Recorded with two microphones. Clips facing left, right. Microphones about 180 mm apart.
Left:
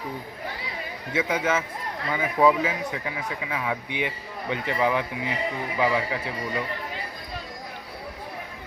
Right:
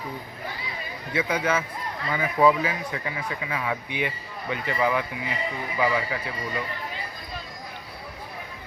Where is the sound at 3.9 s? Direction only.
20° left (ahead or behind).